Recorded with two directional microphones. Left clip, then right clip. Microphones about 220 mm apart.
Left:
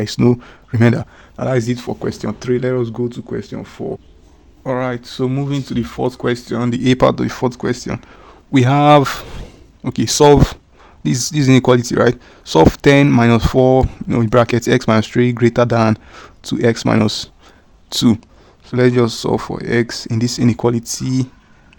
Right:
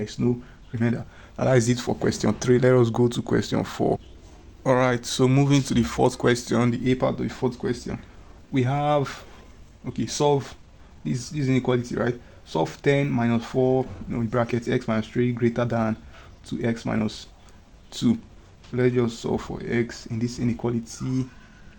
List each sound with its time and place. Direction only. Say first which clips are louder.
0.0 s speech: left 11 dB; 50° left (ahead or behind)
1.4 s speech: left 3 dB; 15° left (ahead or behind)
6.7 s speech: left 10 dB; 35° left (ahead or behind)